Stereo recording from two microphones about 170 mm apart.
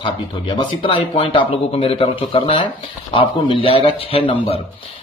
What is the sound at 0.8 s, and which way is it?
Speech, 30° left (ahead or behind).